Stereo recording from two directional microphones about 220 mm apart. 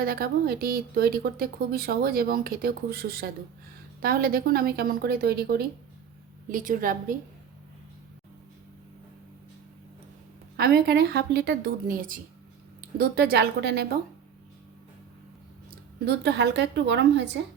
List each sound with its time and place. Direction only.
0.0 s a woman's voice: 45° right (ahead or behind)
10.6 s speech: 45° right (ahead or behind)
16.0 s speech: 50° right (ahead or behind)